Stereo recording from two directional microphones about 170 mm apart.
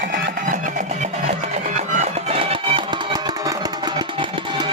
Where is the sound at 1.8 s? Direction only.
45° right (ahead or behind).